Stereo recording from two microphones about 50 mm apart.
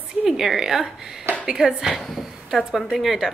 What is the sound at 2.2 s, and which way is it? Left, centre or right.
A woman's voice, centre.